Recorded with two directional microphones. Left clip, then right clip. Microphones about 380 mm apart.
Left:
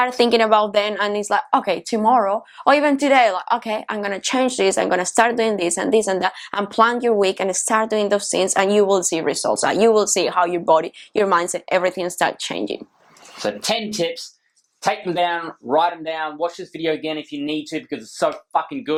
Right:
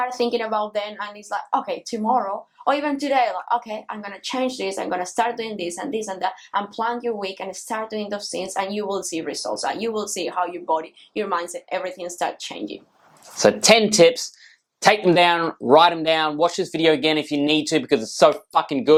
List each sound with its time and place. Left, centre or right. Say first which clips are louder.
0.0 s a woman's voice: left 6 dB; left
13.4 s speech: right 8 dB; right